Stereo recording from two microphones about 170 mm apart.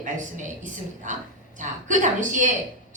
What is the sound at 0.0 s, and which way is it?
A woman's voice, 45° right (ahead or behind).